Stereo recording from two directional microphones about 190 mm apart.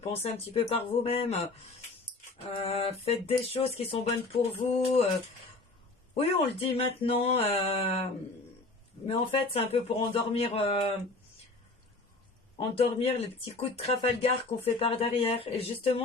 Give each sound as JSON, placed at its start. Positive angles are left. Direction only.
{"t": 0.0, "sound": "speech", "side_deg": 35}
{"t": 2.4, "sound": "speech", "side_deg": 30}
{"t": 6.1, "sound": "speech", "side_deg": 30}
{"t": 9.0, "sound": "speech", "side_deg": 30}
{"t": 12.5, "sound": "speech", "side_deg": 30}